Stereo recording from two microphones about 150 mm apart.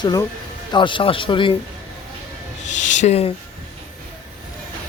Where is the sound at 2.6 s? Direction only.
55° left (ahead or behind).